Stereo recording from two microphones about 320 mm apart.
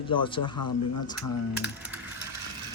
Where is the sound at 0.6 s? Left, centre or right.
Left.